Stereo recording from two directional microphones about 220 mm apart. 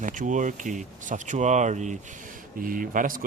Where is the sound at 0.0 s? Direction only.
35° right (ahead or behind).